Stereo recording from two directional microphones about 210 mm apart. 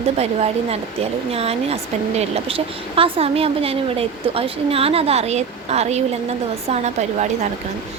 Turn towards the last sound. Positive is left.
turn(degrees=-35)  # may be behind; listen again after turning